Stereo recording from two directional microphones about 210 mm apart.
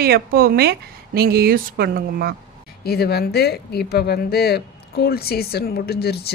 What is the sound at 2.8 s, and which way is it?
A woman's voice, 50° left (ahead or behind).